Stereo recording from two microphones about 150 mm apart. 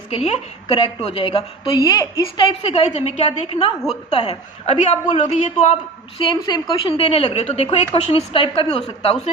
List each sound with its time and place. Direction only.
0.1 s a woman's voice: 40° left (ahead or behind)
1.8 s a woman's voice: 25° left (ahead or behind); by 5.7 s 50° left (ahead or behind)
6.1 s a woman's voice: 30° left (ahead or behind)